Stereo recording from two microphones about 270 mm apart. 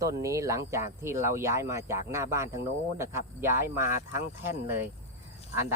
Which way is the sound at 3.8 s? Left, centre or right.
Left.